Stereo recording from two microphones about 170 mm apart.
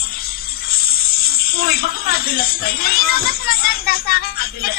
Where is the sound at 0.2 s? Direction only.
60° left (ahead or behind).